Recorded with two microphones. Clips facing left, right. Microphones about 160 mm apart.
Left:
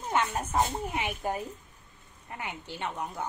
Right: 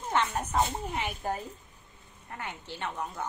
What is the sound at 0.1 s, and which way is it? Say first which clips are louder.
A woman's voice: even; 10° left (ahead or behind).